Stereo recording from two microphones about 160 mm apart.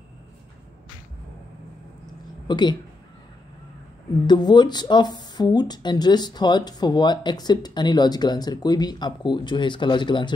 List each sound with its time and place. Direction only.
2.4 s a woman's voice: 30° left (ahead or behind)
4.3 s speech: 25° left (ahead or behind)